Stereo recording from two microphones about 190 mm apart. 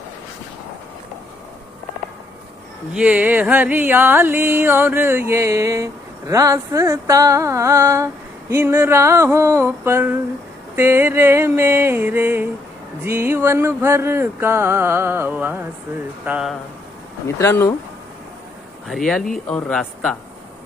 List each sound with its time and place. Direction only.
2.9 s music: 5° right (ahead or behind)
16.2 s speech: 5° right (ahead or behind)
17.2 s speech: 15° left (ahead or behind)
18.9 s speech: centre (ahead or behind)